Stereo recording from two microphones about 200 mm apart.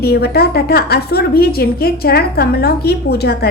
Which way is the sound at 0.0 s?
50° left (ahead or behind).